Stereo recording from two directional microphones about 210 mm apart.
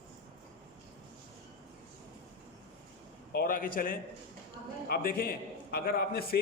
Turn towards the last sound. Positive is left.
turn(degrees=45)  # may be behind; listen again after turning